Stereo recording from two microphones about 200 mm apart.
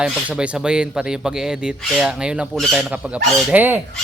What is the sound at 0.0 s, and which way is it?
Speech, 5° right (ahead or behind).